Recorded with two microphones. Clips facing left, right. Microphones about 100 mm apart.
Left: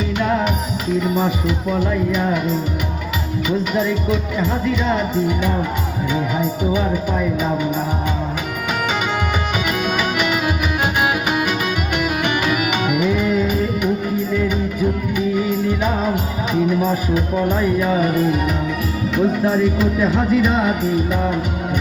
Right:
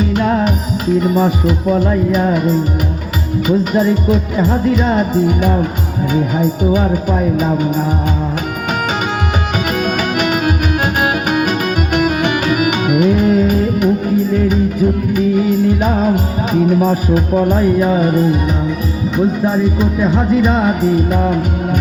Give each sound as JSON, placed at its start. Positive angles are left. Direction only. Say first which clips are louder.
{"t": 0.0, "sound": "music", "louder": "right 4 dB", "side_deg": -40}
{"t": 3.6, "sound": "music", "louder": "right 5 dB", "side_deg": -40}
{"t": 9.8, "sound": "music", "louder": "right 3 dB", "side_deg": -45}